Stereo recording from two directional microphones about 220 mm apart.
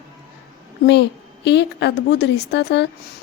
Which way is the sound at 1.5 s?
50° left (ahead or behind).